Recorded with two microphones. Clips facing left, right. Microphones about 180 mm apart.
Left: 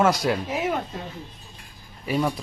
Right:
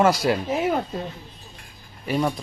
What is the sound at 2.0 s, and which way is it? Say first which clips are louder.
Speech: right 1 dB; centre (ahead or behind).